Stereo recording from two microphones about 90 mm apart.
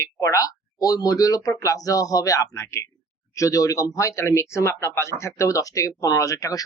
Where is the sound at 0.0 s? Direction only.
40° left (ahead or behind).